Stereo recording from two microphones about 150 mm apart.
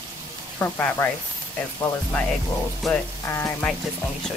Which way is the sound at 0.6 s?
15° left (ahead or behind).